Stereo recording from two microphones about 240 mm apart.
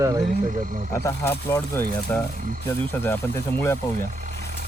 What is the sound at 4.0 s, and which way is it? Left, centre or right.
Speech, right.